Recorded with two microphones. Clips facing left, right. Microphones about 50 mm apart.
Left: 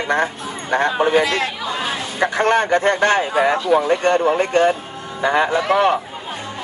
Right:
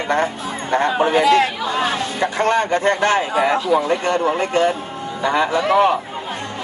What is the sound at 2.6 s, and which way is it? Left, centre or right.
Speech, left.